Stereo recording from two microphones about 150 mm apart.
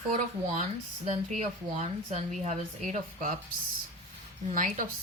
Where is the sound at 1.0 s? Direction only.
55° right (ahead or behind).